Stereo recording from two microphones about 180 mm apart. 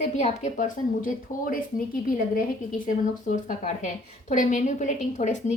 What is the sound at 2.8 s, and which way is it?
A woman's voice, 45° left (ahead or behind).